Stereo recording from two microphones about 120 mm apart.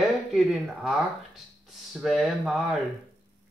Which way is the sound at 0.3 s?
Centre (ahead or behind).